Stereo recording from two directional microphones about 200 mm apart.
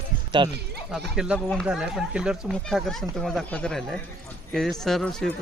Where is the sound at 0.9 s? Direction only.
5° right (ahead or behind).